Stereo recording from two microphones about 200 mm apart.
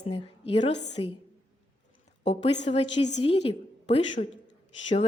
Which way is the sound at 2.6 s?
30° left (ahead or behind).